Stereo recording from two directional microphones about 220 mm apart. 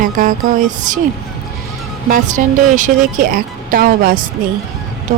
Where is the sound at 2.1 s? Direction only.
35° right (ahead or behind).